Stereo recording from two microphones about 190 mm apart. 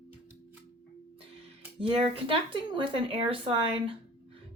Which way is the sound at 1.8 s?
30° right (ahead or behind).